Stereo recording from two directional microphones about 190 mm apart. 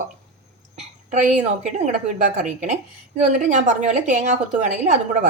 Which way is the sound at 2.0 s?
45° right (ahead or behind).